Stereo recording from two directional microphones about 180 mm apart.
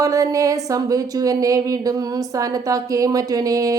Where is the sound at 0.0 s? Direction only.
20° right (ahead or behind).